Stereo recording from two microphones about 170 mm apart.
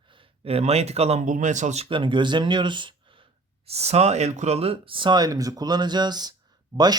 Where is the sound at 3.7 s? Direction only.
40° right (ahead or behind).